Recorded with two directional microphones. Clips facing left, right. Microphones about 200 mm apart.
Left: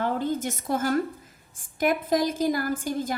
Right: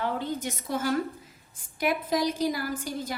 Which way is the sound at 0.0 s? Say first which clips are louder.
Left 4 dB; 50° left (ahead or behind).